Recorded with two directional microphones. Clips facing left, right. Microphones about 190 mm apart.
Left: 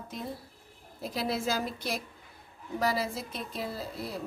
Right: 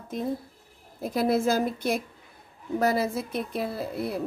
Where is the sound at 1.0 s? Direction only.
50° right (ahead or behind).